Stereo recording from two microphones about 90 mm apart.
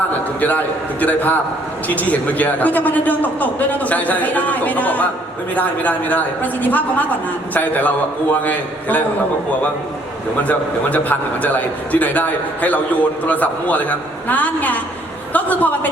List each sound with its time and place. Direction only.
0.3 s a man's voice: 15° left (ahead or behind)
10.4 s a man's voice: 15° left (ahead or behind)